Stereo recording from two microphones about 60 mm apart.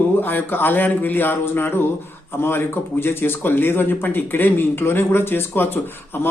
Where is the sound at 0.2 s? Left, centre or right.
Left.